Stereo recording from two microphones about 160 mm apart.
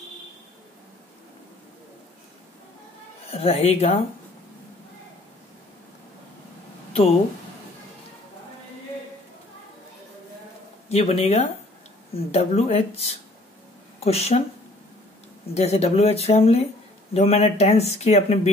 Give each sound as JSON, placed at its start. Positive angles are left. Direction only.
{"t": 3.3, "sound": "speech", "side_deg": 35}
{"t": 10.9, "sound": "speech", "side_deg": 40}
{"t": 15.5, "sound": "speech", "side_deg": 40}